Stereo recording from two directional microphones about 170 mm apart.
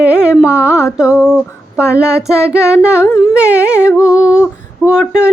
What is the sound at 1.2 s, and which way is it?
Female singing, 5° right (ahead or behind).